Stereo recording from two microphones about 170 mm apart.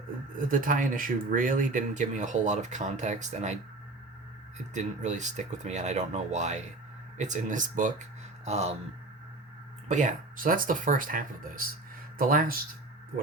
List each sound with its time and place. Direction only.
0.6 s speech: 50° right (ahead or behind)
4.7 s speech: 45° right (ahead or behind)
9.9 s speech: 45° right (ahead or behind)